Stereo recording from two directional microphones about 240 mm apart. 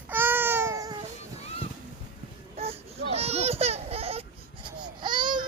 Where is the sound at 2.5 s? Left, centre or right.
Right.